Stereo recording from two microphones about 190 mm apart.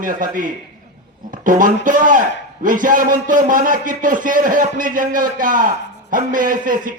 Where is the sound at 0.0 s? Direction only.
45° right (ahead or behind).